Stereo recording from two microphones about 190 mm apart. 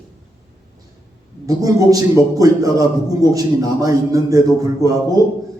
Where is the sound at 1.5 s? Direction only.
20° right (ahead or behind).